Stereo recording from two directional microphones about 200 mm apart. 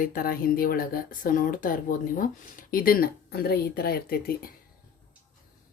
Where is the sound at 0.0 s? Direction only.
45° left (ahead or behind).